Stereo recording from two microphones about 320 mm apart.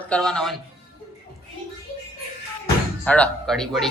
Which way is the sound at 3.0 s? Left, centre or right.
Centre.